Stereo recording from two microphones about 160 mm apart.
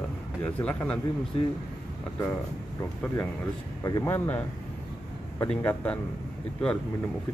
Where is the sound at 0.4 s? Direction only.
10° left (ahead or behind).